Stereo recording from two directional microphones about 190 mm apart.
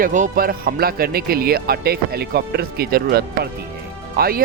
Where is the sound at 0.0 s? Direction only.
45° right (ahead or behind).